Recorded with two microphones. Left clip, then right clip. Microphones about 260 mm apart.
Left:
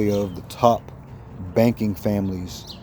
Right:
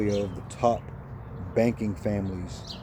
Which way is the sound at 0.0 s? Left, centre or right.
Left.